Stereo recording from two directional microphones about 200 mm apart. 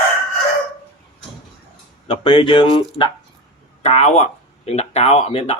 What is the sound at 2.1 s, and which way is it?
Speech, 25° left (ahead or behind).